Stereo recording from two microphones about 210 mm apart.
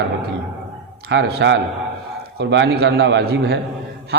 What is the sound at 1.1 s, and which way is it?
A man's voice, 55° right (ahead or behind).